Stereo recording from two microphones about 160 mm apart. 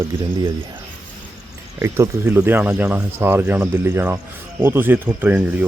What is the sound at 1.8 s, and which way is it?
Speech, 15° right (ahead or behind).